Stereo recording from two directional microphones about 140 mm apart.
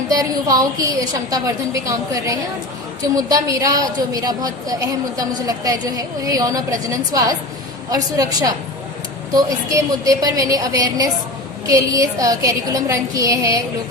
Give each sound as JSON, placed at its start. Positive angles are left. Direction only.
{"t": 0.1, "sound": "a woman's voice", "side_deg": -25}